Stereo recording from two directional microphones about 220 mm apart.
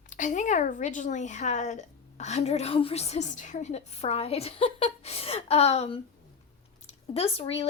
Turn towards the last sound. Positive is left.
turn(degrees=30)  # may be behind; listen again after turning